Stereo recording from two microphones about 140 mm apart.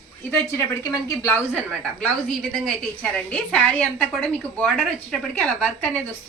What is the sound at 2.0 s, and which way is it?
A woman's voice, 5° left (ahead or behind).